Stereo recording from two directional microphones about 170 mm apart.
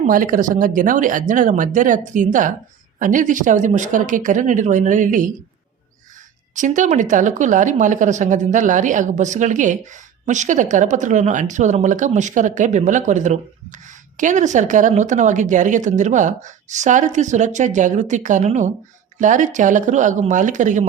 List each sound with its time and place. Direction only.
0.1 s speech: 50° right (ahead or behind)
6.5 s speech: 45° right (ahead or behind)